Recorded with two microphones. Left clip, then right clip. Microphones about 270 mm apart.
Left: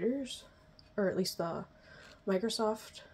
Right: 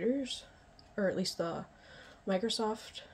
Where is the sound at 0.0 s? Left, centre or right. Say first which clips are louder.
Right 1 dB; left.